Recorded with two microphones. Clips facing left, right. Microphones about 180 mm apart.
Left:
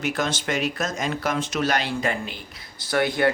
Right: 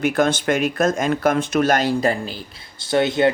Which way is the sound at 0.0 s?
55° right (ahead or behind).